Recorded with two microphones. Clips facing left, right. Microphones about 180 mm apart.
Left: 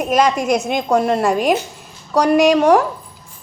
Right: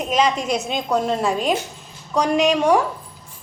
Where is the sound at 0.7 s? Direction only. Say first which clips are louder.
Left 5 dB; 80° left.